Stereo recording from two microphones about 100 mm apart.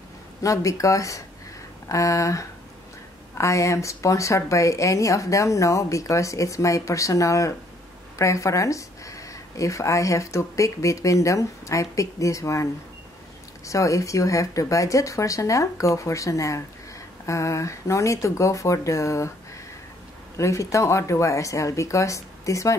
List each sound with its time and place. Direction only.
0.4 s speech: 35° left (ahead or behind)
13.7 s speech: 35° left (ahead or behind)
20.3 s speech: 30° left (ahead or behind)